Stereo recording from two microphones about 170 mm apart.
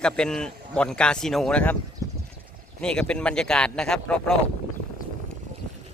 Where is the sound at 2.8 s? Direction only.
5° left (ahead or behind).